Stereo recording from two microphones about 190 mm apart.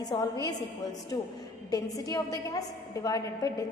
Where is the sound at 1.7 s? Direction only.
20° left (ahead or behind).